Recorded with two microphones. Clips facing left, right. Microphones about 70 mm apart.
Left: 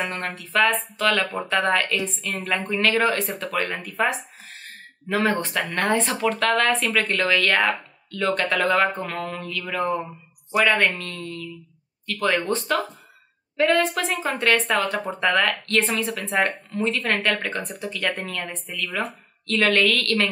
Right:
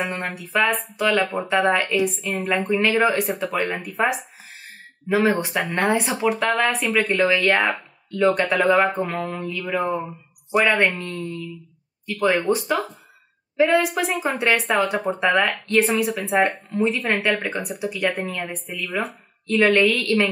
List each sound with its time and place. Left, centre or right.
0.0 s speech: centre
9.8 s speech: centre
10.5 s speech: centre